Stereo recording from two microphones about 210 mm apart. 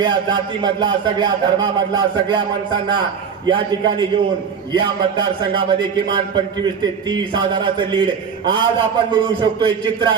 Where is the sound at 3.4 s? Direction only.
20° right (ahead or behind).